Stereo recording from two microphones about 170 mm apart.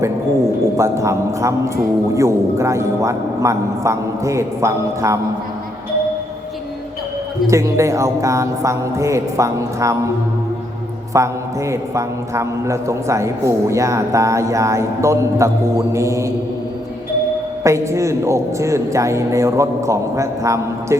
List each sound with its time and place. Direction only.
0.8 s a man's voice: 15° right (ahead or behind)
7.4 s a man's voice: 20° right (ahead or behind)
11.1 s a man's voice: 15° right (ahead or behind)
17.6 s a man's voice: 15° right (ahead or behind)